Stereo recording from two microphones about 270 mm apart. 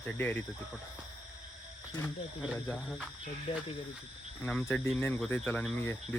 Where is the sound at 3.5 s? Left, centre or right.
Centre.